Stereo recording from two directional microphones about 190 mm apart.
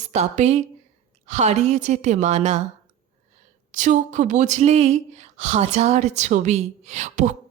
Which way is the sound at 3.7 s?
40° right (ahead or behind).